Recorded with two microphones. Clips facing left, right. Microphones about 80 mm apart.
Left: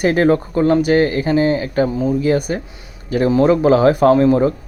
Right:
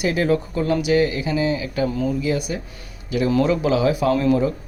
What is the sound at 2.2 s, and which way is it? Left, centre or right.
Speech, left.